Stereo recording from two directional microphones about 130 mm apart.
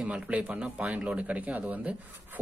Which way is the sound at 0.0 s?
10° right (ahead or behind).